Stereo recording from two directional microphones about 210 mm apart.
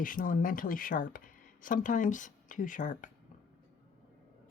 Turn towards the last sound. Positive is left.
turn(degrees=40)  # may be behind; listen again after turning